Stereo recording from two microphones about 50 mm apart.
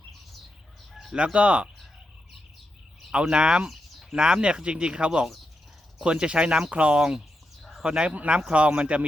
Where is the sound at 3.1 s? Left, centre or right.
Centre.